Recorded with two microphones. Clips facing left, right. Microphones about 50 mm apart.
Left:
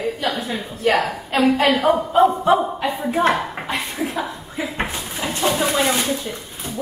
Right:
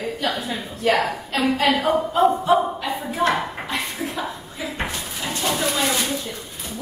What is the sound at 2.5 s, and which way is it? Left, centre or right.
Speech, left.